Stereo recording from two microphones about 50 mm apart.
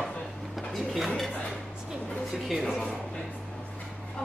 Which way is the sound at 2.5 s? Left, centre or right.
Centre.